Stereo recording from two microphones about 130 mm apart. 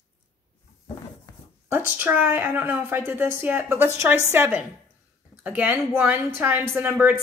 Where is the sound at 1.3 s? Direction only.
25° left (ahead or behind).